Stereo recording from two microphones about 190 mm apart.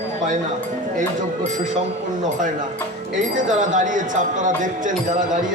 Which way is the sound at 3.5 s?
40° right (ahead or behind).